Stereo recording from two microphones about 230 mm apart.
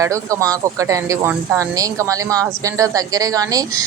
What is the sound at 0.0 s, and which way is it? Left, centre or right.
A woman's voice, centre.